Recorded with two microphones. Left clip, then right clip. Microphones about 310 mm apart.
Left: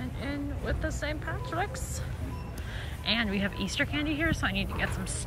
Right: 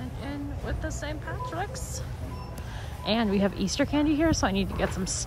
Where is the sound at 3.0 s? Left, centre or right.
Centre.